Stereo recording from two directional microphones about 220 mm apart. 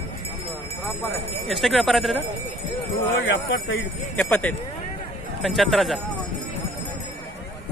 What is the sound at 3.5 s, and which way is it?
Speech, 60° left (ahead or behind).